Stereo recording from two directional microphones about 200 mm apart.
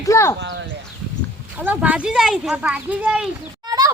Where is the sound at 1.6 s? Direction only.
10° right (ahead or behind).